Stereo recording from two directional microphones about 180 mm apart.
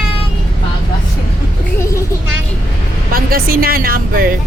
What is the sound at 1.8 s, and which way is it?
Vehicle, 15° left (ahead or behind).